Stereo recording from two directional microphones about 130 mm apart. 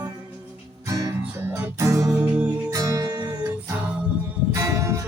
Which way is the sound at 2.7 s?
25° right (ahead or behind).